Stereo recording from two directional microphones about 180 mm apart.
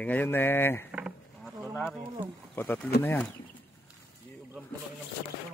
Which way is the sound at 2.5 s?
10° left (ahead or behind).